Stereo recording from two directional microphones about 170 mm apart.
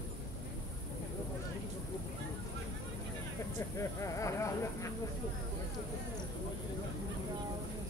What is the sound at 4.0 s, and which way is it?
Speech, 15° left (ahead or behind).